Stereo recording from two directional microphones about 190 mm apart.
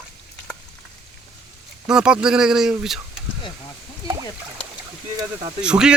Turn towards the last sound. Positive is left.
turn(degrees=-5)  # may be behind; listen again after turning